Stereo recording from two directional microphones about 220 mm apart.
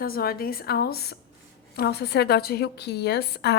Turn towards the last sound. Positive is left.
turn(degrees=50)  # may be behind; listen again after turning